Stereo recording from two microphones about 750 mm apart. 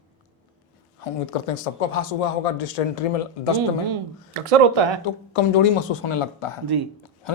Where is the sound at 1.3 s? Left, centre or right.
Left.